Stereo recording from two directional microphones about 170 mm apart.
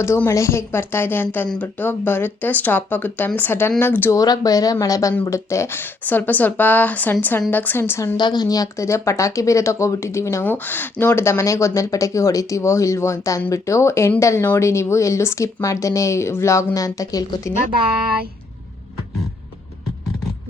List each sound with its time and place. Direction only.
0.0 s speech: 15° left (ahead or behind)